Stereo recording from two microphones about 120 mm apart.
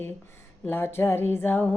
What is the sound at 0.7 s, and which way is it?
Music, 20° left (ahead or behind).